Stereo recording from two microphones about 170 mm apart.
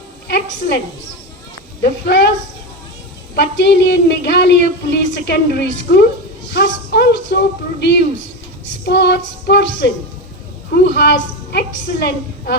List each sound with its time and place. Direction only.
0.3 s a woman's voice: 80° left
1.8 s speech: 70° left (ahead or behind)
3.3 s a woman's voice: 80° left